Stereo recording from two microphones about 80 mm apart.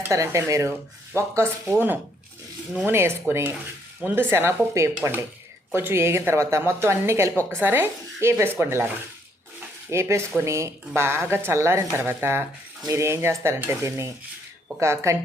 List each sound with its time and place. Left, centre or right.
0.1 s a woman's voice: right
2.8 s a woman's voice: right
9.9 s a woman's voice: right